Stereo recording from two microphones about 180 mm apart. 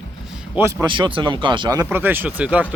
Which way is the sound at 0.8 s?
25° right (ahead or behind).